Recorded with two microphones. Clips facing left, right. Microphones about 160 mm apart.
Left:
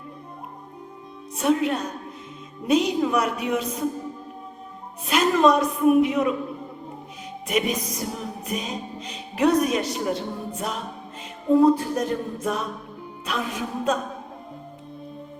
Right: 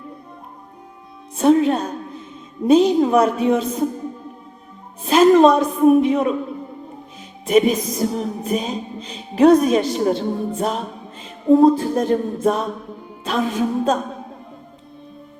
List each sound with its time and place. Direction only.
1.4 s music: 30° right (ahead or behind)
5.0 s a woman's voice: 30° right (ahead or behind)
7.4 s music: 30° right (ahead or behind)
11.8 s music: 30° right (ahead or behind)